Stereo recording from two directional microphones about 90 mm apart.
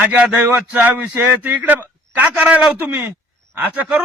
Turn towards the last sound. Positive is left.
turn(degrees=-15)  # may be behind; listen again after turning